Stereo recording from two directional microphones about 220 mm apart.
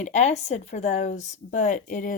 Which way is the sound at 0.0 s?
30° left (ahead or behind).